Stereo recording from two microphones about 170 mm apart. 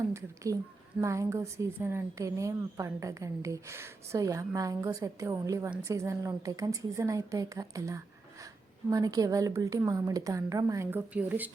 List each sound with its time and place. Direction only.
1.0 s a woman's voice: 15° right (ahead or behind)